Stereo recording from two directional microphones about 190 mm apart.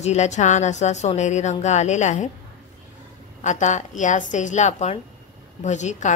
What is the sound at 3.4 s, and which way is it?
A woman's voice, 40° left (ahead or behind).